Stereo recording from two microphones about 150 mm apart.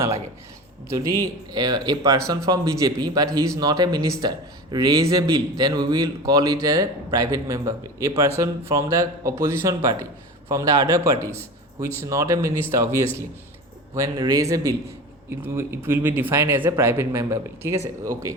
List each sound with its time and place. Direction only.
1.0 s speech: 25° right (ahead or behind)